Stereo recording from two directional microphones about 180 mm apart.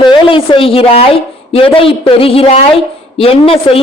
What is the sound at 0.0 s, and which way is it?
A man's voice, 30° left (ahead or behind).